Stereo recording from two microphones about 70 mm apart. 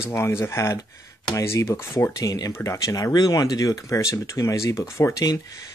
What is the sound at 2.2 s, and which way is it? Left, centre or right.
Speech, left.